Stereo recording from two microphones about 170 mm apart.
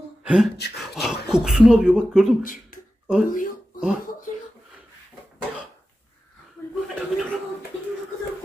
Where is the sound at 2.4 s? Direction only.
55° left (ahead or behind).